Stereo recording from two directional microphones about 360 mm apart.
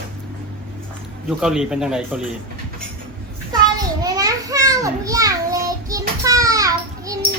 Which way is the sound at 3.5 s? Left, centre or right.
Centre.